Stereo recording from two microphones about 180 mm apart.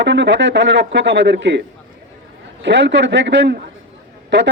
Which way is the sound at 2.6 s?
80° right.